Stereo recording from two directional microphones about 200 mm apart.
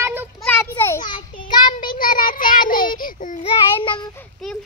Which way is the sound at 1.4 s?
20° left (ahead or behind).